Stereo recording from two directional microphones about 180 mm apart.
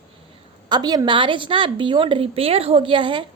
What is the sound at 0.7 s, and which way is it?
Speech, 25° right (ahead or behind).